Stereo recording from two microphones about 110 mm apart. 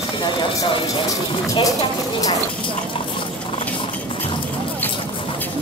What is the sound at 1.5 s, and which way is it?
Speech, 30° left (ahead or behind).